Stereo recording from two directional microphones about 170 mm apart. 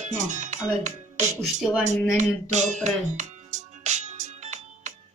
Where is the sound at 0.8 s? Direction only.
45° right (ahead or behind).